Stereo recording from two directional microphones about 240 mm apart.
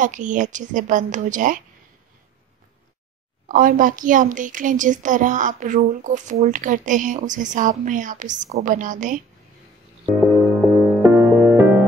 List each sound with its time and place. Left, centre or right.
0.0 s a woman's voice: right
3.4 s a woman's voice: right
10.0 s music: centre